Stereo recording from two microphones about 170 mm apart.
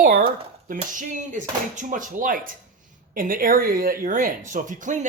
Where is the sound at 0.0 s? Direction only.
60° right (ahead or behind).